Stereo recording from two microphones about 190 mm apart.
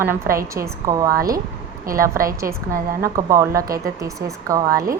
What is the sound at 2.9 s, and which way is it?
A woman's voice, 15° right (ahead or behind).